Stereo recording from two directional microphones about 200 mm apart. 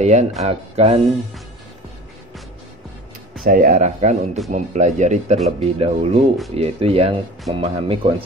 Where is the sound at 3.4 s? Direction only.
45° right (ahead or behind); by 8.1 s 30° right (ahead or behind).